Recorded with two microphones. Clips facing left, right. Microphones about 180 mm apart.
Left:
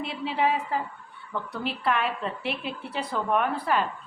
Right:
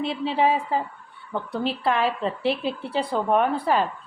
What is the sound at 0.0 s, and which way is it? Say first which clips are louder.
Speech: right 4 dB; 30° right (ahead or behind).